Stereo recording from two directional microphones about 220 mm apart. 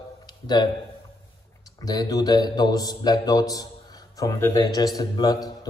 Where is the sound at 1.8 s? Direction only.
15° left (ahead or behind).